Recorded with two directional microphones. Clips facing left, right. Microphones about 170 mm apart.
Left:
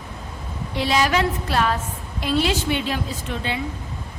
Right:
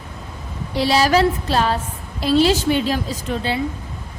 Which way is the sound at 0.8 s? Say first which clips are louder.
Right 4 dB; 35° right (ahead or behind).